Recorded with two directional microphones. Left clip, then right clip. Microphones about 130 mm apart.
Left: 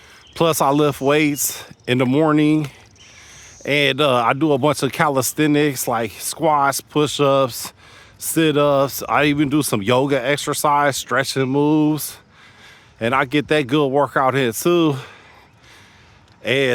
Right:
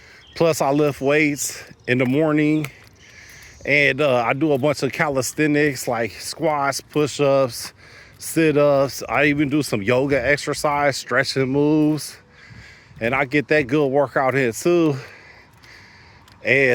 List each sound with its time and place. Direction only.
0.3 s speech: 35° left (ahead or behind)
2.1 s speech: 45° left (ahead or behind)
3.6 s speech: 40° left (ahead or behind)
11.4 s speech: 40° left (ahead or behind)
16.4 s speech: 30° left (ahead or behind)